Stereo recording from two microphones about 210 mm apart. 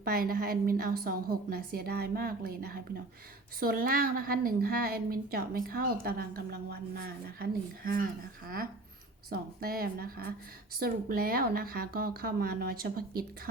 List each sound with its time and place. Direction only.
0.0 s a woman's voice: 45° right (ahead or behind)